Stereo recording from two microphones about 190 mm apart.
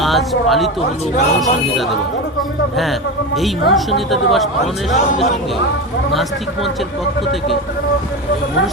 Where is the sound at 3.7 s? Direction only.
Centre (ahead or behind).